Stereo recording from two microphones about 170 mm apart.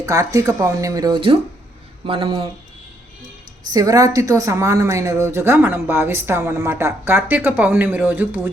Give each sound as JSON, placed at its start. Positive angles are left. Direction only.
{"t": 0.0, "sound": "speech", "side_deg": -20}
{"t": 3.7, "sound": "speech", "side_deg": -20}